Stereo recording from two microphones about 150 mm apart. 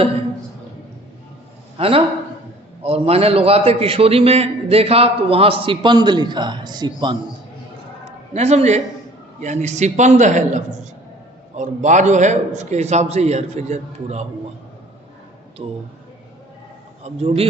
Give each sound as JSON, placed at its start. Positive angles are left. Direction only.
{"t": 1.8, "sound": "a man's voice", "side_deg": -40}
{"t": 8.3, "sound": "a man's voice", "side_deg": -45}
{"t": 15.6, "sound": "a man's voice", "side_deg": -45}
{"t": 17.0, "sound": "a man's voice", "side_deg": -45}